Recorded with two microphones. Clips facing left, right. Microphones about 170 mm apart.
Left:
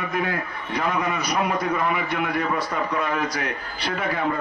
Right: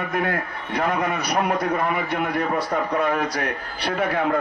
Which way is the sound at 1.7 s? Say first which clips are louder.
Right 1 dB; 45° right (ahead or behind).